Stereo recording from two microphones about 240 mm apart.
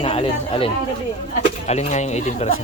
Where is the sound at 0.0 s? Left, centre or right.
Left.